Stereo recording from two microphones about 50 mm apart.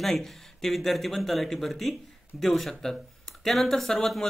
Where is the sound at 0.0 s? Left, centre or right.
Centre.